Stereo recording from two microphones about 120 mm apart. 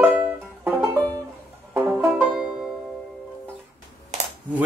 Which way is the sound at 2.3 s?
5° right (ahead or behind).